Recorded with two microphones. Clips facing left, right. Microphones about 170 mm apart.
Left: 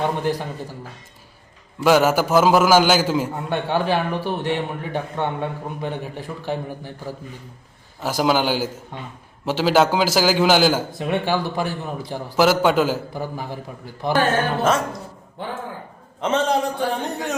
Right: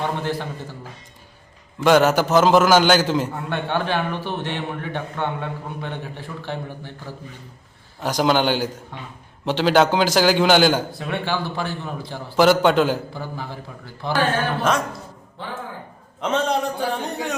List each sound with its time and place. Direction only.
0.0 s a man's voice: 15° left (ahead or behind)
1.8 s a man's voice: 5° left (ahead or behind)
10.9 s a man's voice: 15° left (ahead or behind)
12.4 s a man's voice: 5° left (ahead or behind)
16.2 s a man's voice: centre (ahead or behind)